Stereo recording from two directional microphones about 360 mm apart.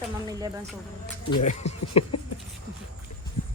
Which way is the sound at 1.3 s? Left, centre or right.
Centre.